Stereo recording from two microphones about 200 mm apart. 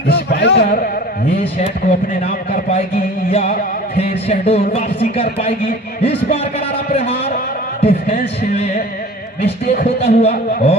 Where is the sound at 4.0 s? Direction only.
30° left (ahead or behind).